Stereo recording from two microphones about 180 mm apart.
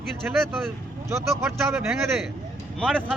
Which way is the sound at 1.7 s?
Centre (ahead or behind).